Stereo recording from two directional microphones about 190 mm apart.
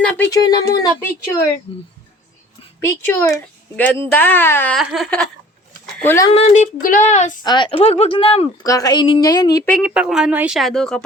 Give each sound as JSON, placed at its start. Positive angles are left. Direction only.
{"t": 0.0, "sound": "a sound", "side_deg": 10}
{"t": 0.3, "sound": "speech", "side_deg": 20}
{"t": 3.1, "sound": "speech", "side_deg": 10}
{"t": 4.8, "sound": "speech", "side_deg": 0}
{"t": 6.2, "sound": "speech", "side_deg": 35}
{"t": 7.4, "sound": "speech", "side_deg": 25}
{"t": 8.6, "sound": "speech", "side_deg": 20}
{"t": 9.6, "sound": "speech", "side_deg": 0}